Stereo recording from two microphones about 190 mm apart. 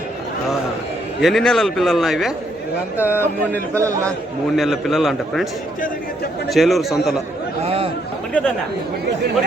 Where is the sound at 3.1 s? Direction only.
10° left (ahead or behind).